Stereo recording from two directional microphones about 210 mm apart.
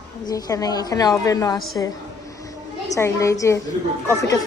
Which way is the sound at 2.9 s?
15° left (ahead or behind).